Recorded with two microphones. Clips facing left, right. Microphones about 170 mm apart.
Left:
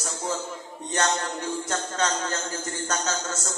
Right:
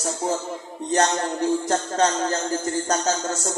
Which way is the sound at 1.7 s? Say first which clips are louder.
Right 6 dB; 35° right (ahead or behind).